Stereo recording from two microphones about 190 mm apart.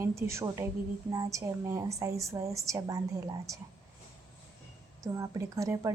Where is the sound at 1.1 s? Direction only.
15° right (ahead or behind).